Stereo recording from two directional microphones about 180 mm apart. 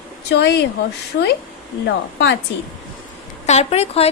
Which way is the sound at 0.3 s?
70° left (ahead or behind).